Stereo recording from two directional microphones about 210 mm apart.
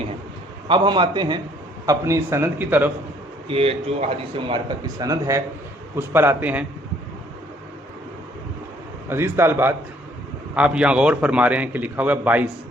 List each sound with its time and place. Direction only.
0.7 s a man's voice: 20° right (ahead or behind)
3.5 s a man's voice: 30° right (ahead or behind); by 6.7 s 10° right (ahead or behind)
9.0 s a man's voice: 10° right (ahead or behind)